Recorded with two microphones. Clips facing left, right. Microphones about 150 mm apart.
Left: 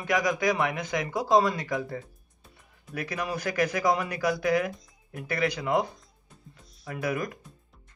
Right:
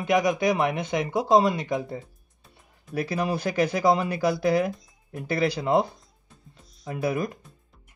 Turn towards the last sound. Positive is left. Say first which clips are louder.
# right 3 dB
turn(degrees=-25)  # may be behind; listen again after turning